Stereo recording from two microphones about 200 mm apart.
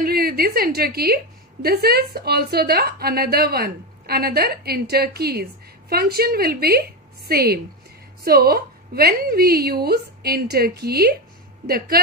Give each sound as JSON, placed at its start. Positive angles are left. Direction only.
{"t": 0.0, "sound": "a woman's voice", "side_deg": -50}